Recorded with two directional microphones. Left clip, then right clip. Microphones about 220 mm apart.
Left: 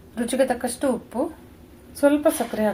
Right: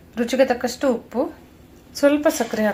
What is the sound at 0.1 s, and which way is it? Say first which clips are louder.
A woman's voice: right 4 dB; 5° right (ahead or behind).